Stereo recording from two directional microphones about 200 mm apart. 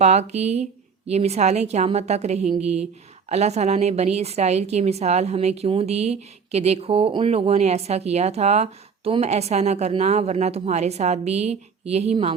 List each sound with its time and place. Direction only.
0.0 s a woman's voice: 35° right (ahead or behind)